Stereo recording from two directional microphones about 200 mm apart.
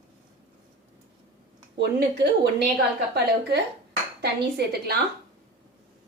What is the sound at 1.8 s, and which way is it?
Speech, 55° right (ahead or behind).